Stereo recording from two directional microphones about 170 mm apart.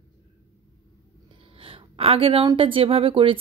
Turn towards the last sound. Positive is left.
turn(degrees=-30)  # may be behind; listen again after turning